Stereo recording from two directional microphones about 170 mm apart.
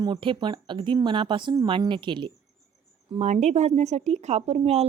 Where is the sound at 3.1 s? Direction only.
40° right (ahead or behind).